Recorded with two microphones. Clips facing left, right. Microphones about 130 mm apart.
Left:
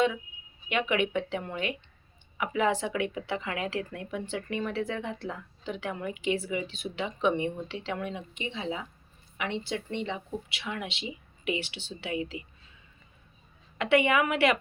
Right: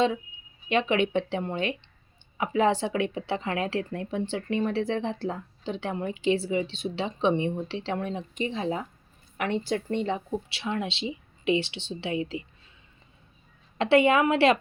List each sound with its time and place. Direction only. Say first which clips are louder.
0.7 s a woman's voice: right 4 dB; 30° right (ahead or behind)
10.6 s speech: right 6 dB; 30° right (ahead or behind)
13.7 s speech: right 4 dB; 30° right (ahead or behind)